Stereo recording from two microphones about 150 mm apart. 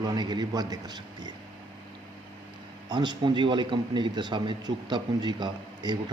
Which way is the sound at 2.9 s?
30° right (ahead or behind).